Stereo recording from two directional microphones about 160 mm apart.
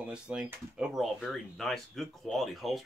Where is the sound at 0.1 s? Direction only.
5° right (ahead or behind).